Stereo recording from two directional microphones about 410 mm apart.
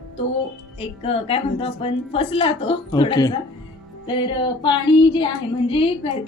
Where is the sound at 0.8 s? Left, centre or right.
Centre.